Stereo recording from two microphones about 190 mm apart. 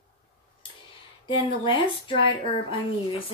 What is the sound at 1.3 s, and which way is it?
Speech, 25° left (ahead or behind).